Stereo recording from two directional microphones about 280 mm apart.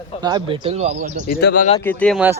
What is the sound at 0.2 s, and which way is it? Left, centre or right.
Speech, centre.